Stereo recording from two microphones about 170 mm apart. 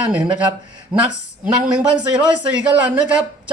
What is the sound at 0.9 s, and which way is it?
Speech, 25° right (ahead or behind).